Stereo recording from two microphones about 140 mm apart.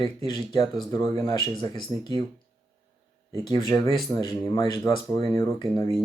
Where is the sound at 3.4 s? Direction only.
25° left (ahead or behind).